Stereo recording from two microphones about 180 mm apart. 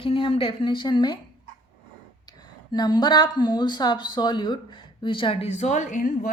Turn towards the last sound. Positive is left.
turn(degrees=50)  # may be behind; listen again after turning